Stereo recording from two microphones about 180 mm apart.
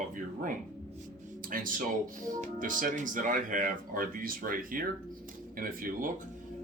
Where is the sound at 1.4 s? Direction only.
50° right (ahead or behind).